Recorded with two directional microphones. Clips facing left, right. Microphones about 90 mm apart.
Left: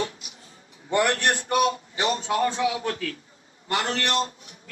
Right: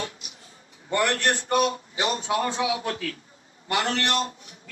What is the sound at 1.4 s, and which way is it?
Speech, 35° right (ahead or behind).